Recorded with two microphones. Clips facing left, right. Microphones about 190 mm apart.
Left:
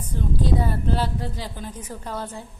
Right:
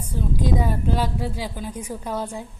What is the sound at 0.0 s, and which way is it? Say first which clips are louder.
Speech: right 1 dB; 10° right (ahead or behind).